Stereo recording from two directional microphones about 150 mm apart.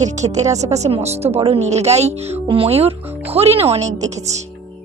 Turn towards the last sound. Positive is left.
turn(degrees=-50)  # may be behind; listen again after turning